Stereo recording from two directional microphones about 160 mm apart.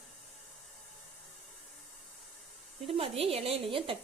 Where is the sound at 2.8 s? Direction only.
35° right (ahead or behind).